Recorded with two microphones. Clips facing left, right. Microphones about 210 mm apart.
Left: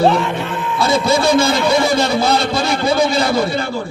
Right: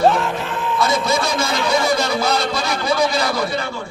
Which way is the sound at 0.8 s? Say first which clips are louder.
Left 5 dB; 30° left (ahead or behind).